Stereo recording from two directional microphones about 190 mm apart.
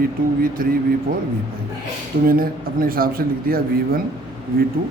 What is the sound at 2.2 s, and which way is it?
Speech, 50° right (ahead or behind).